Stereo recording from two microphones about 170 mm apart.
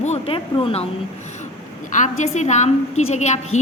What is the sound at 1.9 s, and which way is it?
A woman's voice, 45° left (ahead or behind).